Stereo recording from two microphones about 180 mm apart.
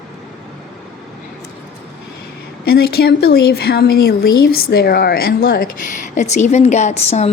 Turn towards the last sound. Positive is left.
turn(degrees=40)  # may be behind; listen again after turning